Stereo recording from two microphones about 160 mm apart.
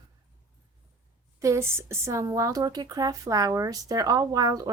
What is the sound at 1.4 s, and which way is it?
Speech, 20° right (ahead or behind).